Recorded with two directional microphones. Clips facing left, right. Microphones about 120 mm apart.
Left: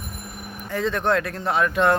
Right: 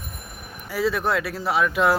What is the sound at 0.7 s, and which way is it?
Speech, 5° right (ahead or behind).